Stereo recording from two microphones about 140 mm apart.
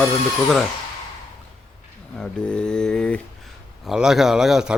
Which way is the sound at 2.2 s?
5° left (ahead or behind).